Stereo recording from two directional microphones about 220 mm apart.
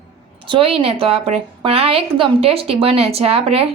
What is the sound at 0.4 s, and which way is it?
A woman's voice, 25° right (ahead or behind).